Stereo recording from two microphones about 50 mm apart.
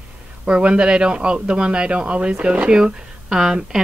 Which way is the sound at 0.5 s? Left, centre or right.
Right.